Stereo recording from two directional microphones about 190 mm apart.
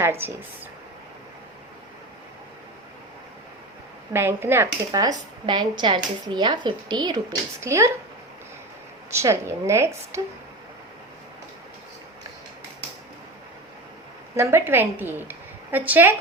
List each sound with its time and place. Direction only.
0.0 s speech: 10° right (ahead or behind)
4.1 s speech: 10° right (ahead or behind)
9.0 s speech: 15° right (ahead or behind)
14.3 s a woman's voice: 15° right (ahead or behind)